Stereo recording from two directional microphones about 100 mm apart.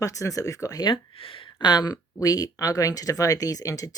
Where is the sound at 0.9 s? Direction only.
60° left (ahead or behind).